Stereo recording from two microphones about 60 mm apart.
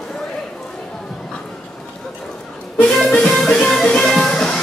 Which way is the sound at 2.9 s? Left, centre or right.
Centre.